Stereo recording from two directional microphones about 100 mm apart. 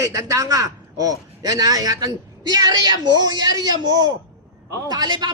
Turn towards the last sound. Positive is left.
turn(degrees=-50)  # may be behind; listen again after turning